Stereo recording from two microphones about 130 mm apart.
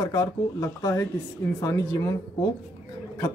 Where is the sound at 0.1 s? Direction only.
30° left (ahead or behind).